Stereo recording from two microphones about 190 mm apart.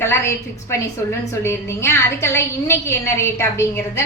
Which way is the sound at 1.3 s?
15° left (ahead or behind).